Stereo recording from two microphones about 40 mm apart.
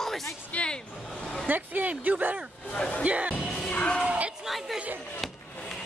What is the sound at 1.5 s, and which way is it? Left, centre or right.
Speech, right.